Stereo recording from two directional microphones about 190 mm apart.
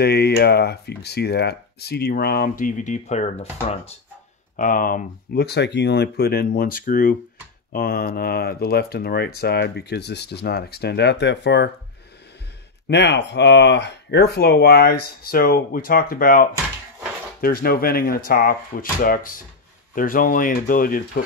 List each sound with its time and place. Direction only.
0.0 s speech: 60° left (ahead or behind); by 3.9 s 35° left (ahead or behind)
4.6 s speech: 45° left (ahead or behind); by 11.7 s 65° left (ahead or behind)
12.8 s speech: 65° left (ahead or behind)